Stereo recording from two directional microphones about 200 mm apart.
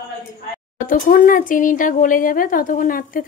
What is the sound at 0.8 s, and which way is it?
A woman's voice, 45° left (ahead or behind).